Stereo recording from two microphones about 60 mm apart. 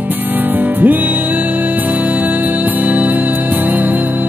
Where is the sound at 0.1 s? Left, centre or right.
Right.